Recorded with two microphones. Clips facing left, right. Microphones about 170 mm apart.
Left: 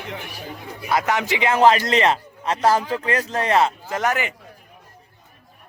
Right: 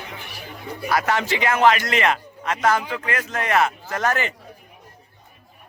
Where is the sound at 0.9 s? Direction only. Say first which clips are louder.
Left 1 dB; 20° left (ahead or behind).